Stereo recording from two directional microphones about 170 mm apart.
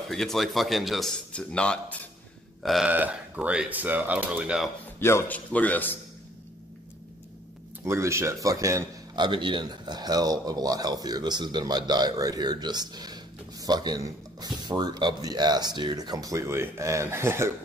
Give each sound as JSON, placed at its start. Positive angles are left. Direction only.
{"t": 0.1, "sound": "speech", "side_deg": 0}
{"t": 5.0, "sound": "a man's voice", "side_deg": 10}
{"t": 7.8, "sound": "a man's voice", "side_deg": -15}